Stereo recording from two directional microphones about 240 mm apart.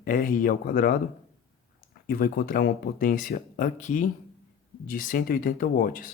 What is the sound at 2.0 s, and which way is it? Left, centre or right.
Speech, left.